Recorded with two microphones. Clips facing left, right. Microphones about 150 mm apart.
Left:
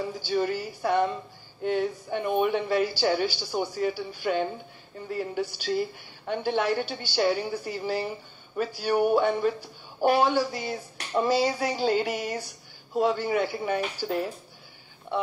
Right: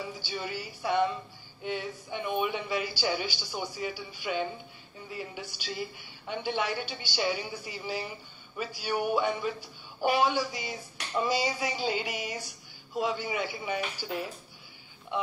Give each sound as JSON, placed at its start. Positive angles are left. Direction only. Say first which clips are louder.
{"t": 0.0, "sound": "a woman's voice", "louder": "left 9 dB", "side_deg": 45}